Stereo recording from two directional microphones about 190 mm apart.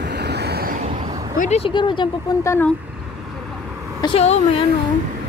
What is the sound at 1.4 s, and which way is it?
Speech, 35° left (ahead or behind).